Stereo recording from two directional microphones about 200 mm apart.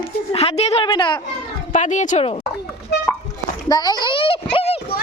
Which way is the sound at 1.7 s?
40° left (ahead or behind).